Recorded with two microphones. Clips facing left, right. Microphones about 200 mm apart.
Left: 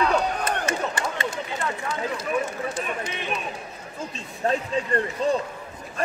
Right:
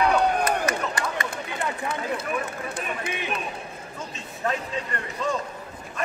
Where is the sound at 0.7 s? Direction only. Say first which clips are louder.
Even; 25° left (ahead or behind).